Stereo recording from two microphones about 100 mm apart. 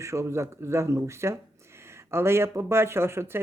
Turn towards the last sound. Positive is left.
turn(degrees=-25)  # may be behind; listen again after turning